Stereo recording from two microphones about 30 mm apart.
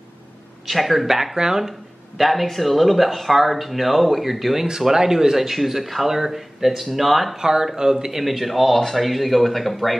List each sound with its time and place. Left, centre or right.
0.7 s speech: centre
1.3 s speech: right
1.6 s speech: centre
4.8 s speech: centre
7.3 s speech: centre
8.2 s speech: centre